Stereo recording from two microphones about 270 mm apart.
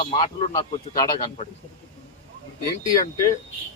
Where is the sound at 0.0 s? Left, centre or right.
Centre.